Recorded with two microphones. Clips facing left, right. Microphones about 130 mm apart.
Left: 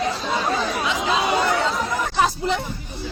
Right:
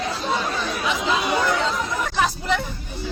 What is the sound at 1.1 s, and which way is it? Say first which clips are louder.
Speech: left 2 dB; 25° left (ahead or behind).